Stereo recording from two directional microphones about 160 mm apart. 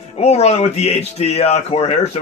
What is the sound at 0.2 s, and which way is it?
Speech, 40° left (ahead or behind).